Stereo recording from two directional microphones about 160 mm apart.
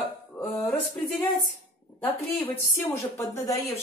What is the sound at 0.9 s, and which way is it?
Speech, 10° left (ahead or behind).